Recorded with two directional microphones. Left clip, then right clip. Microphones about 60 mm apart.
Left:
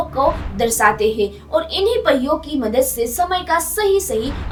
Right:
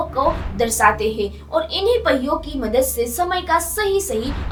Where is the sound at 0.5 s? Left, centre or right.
Left.